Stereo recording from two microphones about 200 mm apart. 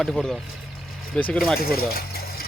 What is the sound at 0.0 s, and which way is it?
Speech, 5° left (ahead or behind).